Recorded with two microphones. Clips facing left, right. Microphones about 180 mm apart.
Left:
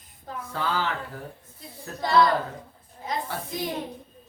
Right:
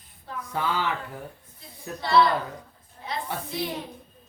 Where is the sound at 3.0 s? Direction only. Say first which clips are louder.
Left 1 dB; 45° left (ahead or behind).